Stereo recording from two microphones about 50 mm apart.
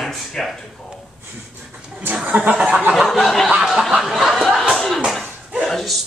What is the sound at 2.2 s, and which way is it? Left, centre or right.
Speech, right.